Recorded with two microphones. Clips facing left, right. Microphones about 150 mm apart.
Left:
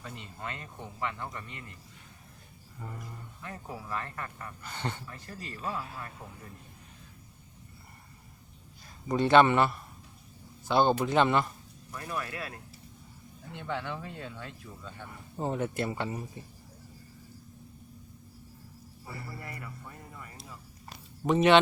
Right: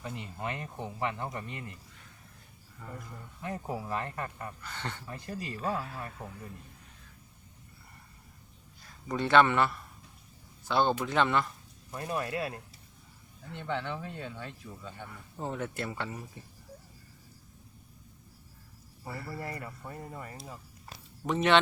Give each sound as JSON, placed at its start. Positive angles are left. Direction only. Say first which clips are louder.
{"t": 0.0, "sound": "speech", "louder": "right 4 dB", "side_deg": -20}
{"t": 3.4, "sound": "speech", "louder": "right 6 dB", "side_deg": -25}
{"t": 4.6, "sound": "speech", "louder": "left 8 dB", "side_deg": 15}
{"t": 5.0, "sound": "speech", "louder": "right 5 dB", "side_deg": -20}
{"t": 9.0, "sound": "speech", "louder": "left 3 dB", "side_deg": 20}
{"t": 11.9, "sound": "speech", "louder": "right 3 dB", "side_deg": -30}
{"t": 13.5, "sound": "speech", "louder": "right 1 dB", "side_deg": 5}
{"t": 15.4, "sound": "speech", "louder": "left 4 dB", "side_deg": 20}
{"t": 19.4, "sound": "speech", "louder": "right 4 dB", "side_deg": -35}
{"t": 21.2, "sound": "speech", "louder": "left 4 dB", "side_deg": 10}